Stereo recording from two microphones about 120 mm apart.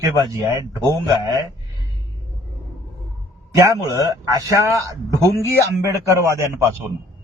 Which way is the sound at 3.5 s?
25° right (ahead or behind).